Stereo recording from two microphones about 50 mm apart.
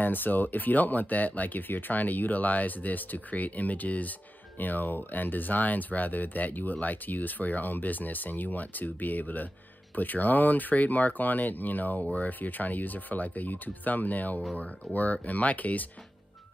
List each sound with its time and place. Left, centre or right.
0.0 s speech: left
12.0 s speech: left
12.3 s speech: left
14.8 s speech: centre
15.2 s speech: left